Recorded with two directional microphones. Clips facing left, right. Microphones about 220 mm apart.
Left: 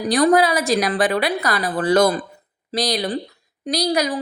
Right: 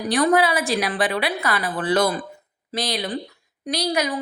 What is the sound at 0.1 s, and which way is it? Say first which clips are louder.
A woman's voice: left 3 dB; 35° left (ahead or behind).